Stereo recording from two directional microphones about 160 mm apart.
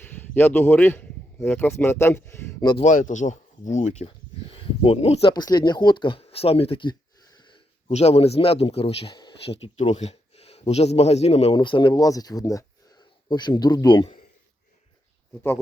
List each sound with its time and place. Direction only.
0.0 s speech: 15° left (ahead or behind)
2.7 s speech: 50° left (ahead or behind)
5.3 s speech: 25° left (ahead or behind)
7.9 s speech: 40° left (ahead or behind)